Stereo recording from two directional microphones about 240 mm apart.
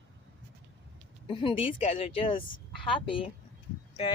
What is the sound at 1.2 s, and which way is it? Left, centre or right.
Speech, left.